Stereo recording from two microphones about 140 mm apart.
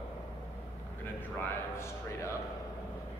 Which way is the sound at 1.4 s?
20° left (ahead or behind).